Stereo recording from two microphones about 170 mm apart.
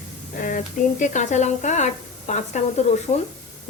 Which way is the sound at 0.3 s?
50° left (ahead or behind).